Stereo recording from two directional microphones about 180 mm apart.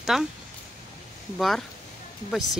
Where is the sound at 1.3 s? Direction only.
Centre (ahead or behind).